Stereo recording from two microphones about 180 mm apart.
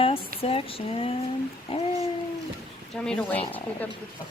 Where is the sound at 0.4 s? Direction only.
30° left (ahead or behind).